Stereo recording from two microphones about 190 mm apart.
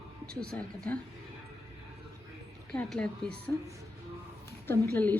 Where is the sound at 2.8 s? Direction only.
5° left (ahead or behind).